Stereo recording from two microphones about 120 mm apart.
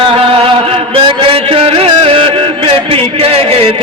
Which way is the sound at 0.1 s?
50° right (ahead or behind).